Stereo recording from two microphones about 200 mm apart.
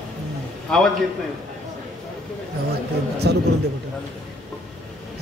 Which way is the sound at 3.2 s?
60° right (ahead or behind).